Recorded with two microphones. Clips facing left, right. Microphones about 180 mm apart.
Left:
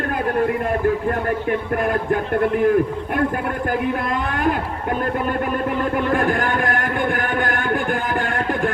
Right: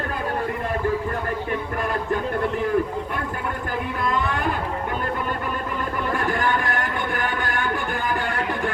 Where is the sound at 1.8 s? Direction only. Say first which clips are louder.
Left 4 dB; 55° left (ahead or behind).